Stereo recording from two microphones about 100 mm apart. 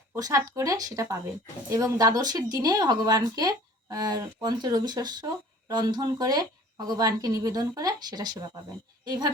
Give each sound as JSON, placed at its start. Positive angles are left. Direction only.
{"t": 0.2, "sound": "speech", "side_deg": -35}